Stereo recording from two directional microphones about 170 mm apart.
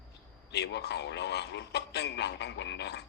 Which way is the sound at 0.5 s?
80° left.